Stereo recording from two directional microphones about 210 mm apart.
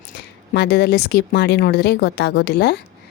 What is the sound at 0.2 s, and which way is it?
A woman's voice, 50° left (ahead or behind).